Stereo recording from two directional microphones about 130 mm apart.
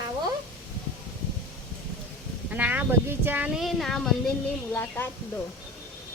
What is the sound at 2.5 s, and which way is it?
Speech, 10° right (ahead or behind).